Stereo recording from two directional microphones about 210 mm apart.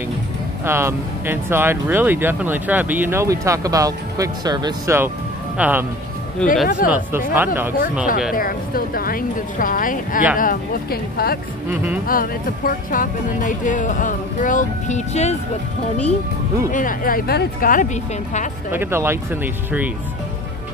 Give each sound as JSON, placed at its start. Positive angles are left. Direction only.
{"t": 0.7, "sound": "speech", "side_deg": -10}
{"t": 6.4, "sound": "speech", "side_deg": 5}
{"t": 6.9, "sound": "speech", "side_deg": -10}
{"t": 8.4, "sound": "a woman's voice", "side_deg": 45}
{"t": 11.7, "sound": "speech", "side_deg": -10}
{"t": 12.1, "sound": "speech", "side_deg": 40}
{"t": 16.7, "sound": "speech", "side_deg": 40}
{"t": 18.7, "sound": "speech", "side_deg": -10}